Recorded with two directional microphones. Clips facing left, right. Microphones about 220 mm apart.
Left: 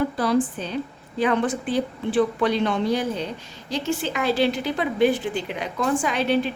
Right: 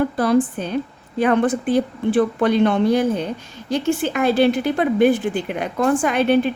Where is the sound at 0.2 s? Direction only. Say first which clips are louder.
Right 4 dB; 50° right (ahead or behind).